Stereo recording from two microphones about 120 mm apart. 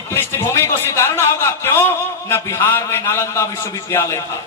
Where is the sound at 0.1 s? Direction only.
20° left (ahead or behind).